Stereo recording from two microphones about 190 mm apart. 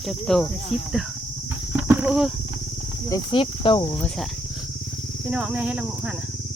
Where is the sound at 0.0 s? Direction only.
Centre (ahead or behind).